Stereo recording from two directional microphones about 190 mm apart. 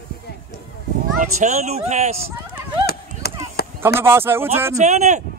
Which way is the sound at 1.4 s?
35° right (ahead or behind).